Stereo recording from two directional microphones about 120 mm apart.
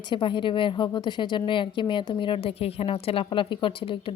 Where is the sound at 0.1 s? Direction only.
45° left (ahead or behind).